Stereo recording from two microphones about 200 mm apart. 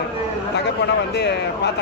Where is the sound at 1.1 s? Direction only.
55° left (ahead or behind).